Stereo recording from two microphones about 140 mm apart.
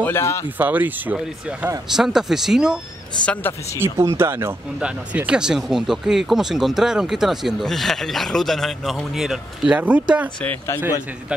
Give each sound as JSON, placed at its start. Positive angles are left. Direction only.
{"t": 0.0, "sound": "speech", "side_deg": 20}
{"t": 0.6, "sound": "speech", "side_deg": -15}
{"t": 3.4, "sound": "speech", "side_deg": 15}
{"t": 3.8, "sound": "speech", "side_deg": -20}
{"t": 10.4, "sound": "speech", "side_deg": 10}